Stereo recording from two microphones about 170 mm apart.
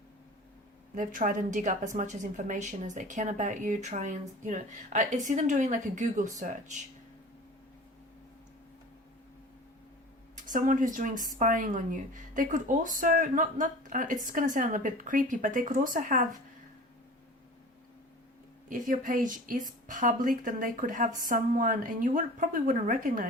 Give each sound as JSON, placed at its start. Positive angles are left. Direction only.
{"t": 0.9, "sound": "a woman's voice", "side_deg": -50}
{"t": 10.3, "sound": "a woman's voice", "side_deg": -50}
{"t": 18.7, "sound": "a woman's voice", "side_deg": -50}